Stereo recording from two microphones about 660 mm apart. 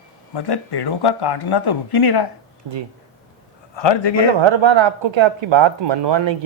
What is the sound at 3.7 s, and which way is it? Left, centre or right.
Speech, left.